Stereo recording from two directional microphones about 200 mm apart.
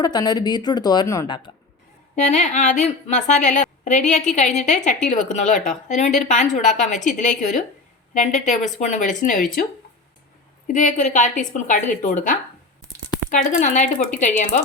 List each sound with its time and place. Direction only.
0.0 s speech: 20° left (ahead or behind)
2.1 s a woman's voice: 35° left (ahead or behind)
10.7 s a woman's voice: 40° left (ahead or behind)
12.8 s a sound: 15° right (ahead or behind)
13.3 s a woman's voice: 40° left (ahead or behind)